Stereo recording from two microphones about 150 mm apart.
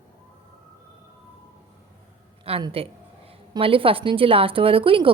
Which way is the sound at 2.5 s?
40° right (ahead or behind).